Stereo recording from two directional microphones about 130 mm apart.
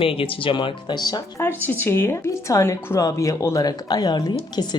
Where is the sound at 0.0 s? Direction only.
45° left (ahead or behind).